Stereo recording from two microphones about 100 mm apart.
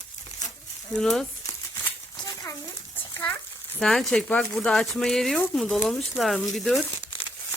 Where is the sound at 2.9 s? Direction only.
20° left (ahead or behind).